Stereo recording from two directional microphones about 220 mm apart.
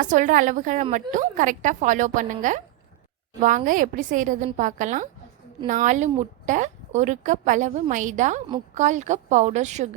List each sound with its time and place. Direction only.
0.0 s a woman's voice: 35° right (ahead or behind)